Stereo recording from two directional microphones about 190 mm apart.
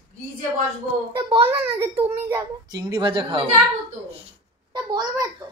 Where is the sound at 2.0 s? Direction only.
20° right (ahead or behind).